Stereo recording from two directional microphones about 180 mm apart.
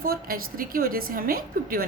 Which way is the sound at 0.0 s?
55° right (ahead or behind).